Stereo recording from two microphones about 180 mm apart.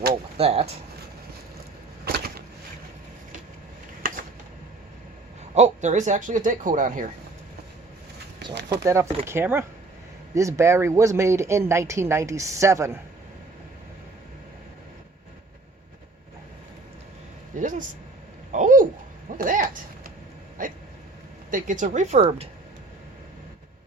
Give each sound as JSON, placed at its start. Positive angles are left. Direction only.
{"t": 0.3, "sound": "speech", "side_deg": -35}
{"t": 2.0, "sound": "vehicle", "side_deg": -55}
{"t": 5.5, "sound": "speech", "side_deg": -40}
{"t": 8.8, "sound": "speech", "side_deg": -15}
{"t": 17.6, "sound": "a sound", "side_deg": -45}
{"t": 20.6, "sound": "hiccup", "side_deg": -50}
{"t": 21.5, "sound": "speech", "side_deg": -45}